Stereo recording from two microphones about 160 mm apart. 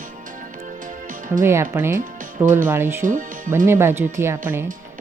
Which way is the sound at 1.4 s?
15° right (ahead or behind).